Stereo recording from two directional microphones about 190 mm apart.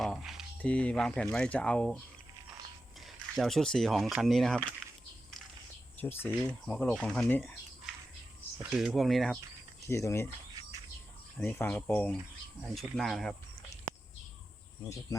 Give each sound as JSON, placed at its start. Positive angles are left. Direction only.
{"t": 0.0, "sound": "a sound", "side_deg": 0}
{"t": 0.6, "sound": "speech", "side_deg": 5}
{"t": 3.3, "sound": "speech", "side_deg": 0}
{"t": 6.0, "sound": "speech", "side_deg": 10}
{"t": 8.7, "sound": "speech", "side_deg": -5}
{"t": 9.8, "sound": "speech", "side_deg": 15}
{"t": 11.4, "sound": "speech", "side_deg": 10}